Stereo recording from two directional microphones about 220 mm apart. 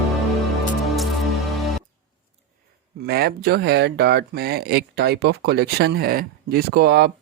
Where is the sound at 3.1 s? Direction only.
45° right (ahead or behind).